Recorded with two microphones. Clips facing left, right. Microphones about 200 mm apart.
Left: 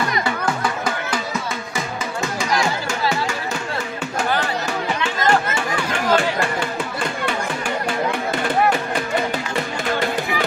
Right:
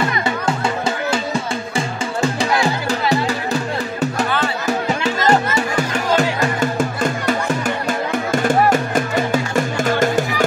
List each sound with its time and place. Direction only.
0.8 s music: 25° right (ahead or behind)
2.6 s music: 35° right (ahead or behind)
5.0 s music: 40° right (ahead or behind)